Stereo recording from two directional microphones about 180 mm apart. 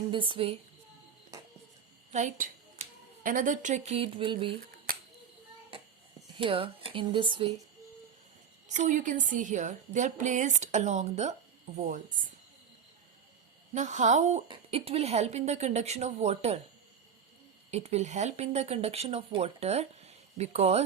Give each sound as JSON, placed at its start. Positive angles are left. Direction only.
{"t": 0.1, "sound": "speech", "side_deg": -30}
{"t": 2.1, "sound": "a sound", "side_deg": -45}
{"t": 3.2, "sound": "speech", "side_deg": -45}
{"t": 6.3, "sound": "speech", "side_deg": -30}
{"t": 8.7, "sound": "a woman's voice", "side_deg": -45}
{"t": 13.7, "sound": "speech", "side_deg": -40}
{"t": 17.7, "sound": "speech", "side_deg": -35}